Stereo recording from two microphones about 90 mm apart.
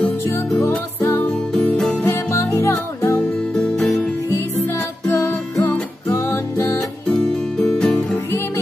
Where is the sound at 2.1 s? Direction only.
35° left (ahead or behind).